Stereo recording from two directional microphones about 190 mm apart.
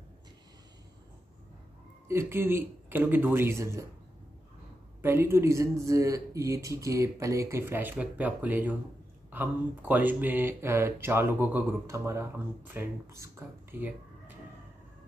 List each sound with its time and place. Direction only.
2.0 s speech: 10° right (ahead or behind)
5.0 s speech: 15° right (ahead or behind)